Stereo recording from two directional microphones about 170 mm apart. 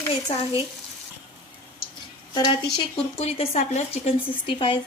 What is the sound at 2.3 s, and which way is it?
A woman's voice, 30° left (ahead or behind).